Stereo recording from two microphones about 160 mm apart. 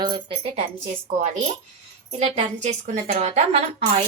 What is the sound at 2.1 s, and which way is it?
A woman's voice, 45° right (ahead or behind).